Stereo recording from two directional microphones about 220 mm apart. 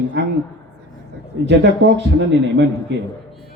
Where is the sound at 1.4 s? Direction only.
55° right (ahead or behind).